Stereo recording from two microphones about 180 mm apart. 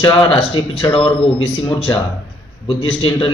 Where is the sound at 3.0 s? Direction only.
25° left (ahead or behind).